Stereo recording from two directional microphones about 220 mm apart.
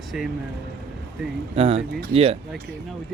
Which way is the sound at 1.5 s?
25° right (ahead or behind).